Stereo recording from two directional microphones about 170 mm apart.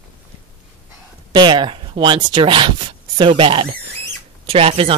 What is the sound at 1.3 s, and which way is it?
Speech, 25° right (ahead or behind).